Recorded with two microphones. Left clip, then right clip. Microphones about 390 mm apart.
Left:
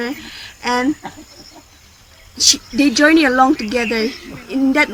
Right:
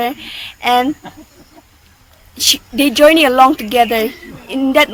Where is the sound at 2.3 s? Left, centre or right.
Centre.